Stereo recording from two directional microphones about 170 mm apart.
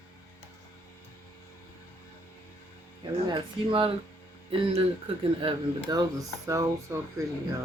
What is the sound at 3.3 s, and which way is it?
Speech, 30° right (ahead or behind).